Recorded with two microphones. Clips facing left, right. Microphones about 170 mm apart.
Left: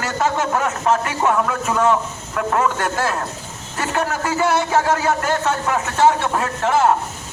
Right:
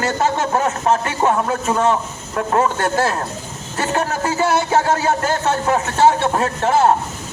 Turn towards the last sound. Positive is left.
turn(degrees=-30)  # may be behind; listen again after turning